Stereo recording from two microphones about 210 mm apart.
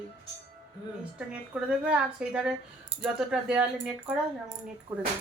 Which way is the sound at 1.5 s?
5° right (ahead or behind).